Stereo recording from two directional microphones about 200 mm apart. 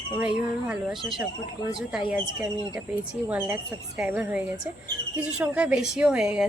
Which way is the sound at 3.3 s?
10° right (ahead or behind).